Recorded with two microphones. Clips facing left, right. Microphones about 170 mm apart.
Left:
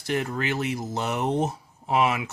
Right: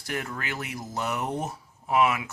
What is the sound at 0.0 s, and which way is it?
Speech, 25° left (ahead or behind).